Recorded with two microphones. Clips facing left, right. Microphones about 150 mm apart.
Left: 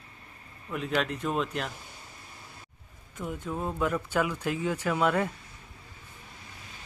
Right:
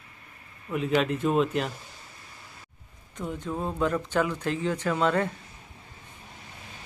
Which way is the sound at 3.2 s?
5° left (ahead or behind).